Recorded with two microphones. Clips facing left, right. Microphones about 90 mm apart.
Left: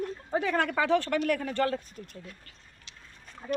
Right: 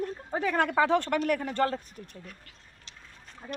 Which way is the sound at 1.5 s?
25° right (ahead or behind).